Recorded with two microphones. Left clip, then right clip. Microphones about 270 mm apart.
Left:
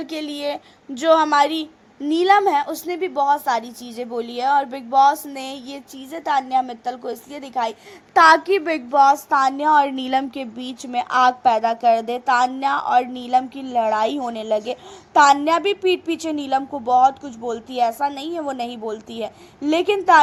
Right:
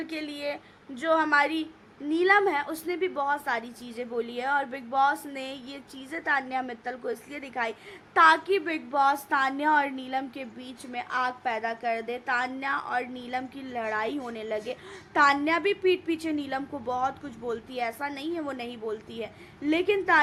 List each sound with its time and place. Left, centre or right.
0.0 s a woman's voice: centre
8.9 s a woman's voice: centre
9.9 s a woman's voice: left